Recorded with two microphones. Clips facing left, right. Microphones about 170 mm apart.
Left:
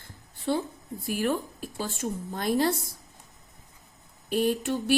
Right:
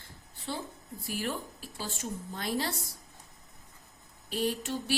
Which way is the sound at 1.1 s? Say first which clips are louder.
Left 8 dB; 55° left (ahead or behind).